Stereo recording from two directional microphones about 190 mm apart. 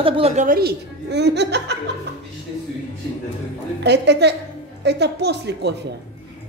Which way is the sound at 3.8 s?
60° right (ahead or behind).